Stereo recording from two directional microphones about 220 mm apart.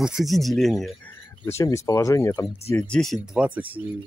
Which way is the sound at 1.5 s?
15° left (ahead or behind).